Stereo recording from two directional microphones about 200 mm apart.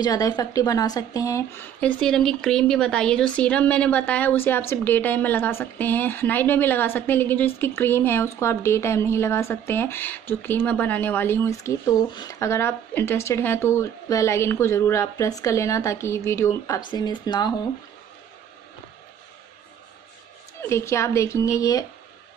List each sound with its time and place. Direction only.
0.0 s speech: 20° left (ahead or behind)
20.6 s speech: 15° left (ahead or behind)